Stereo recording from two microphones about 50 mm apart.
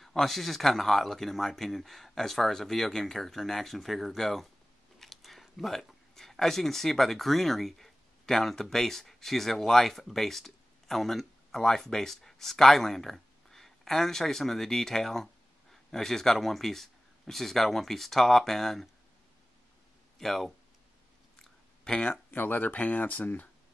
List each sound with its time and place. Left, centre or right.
0.0 s speech: centre
20.2 s speech: centre
21.4 s chewing: centre
22.3 s speech: left